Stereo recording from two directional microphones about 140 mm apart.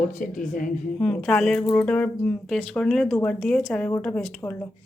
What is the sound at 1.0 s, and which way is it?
A woman's voice, centre (ahead or behind).